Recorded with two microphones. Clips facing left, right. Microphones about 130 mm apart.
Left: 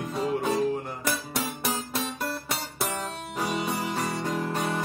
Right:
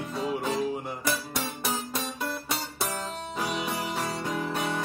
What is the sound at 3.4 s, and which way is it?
Music, centre (ahead or behind).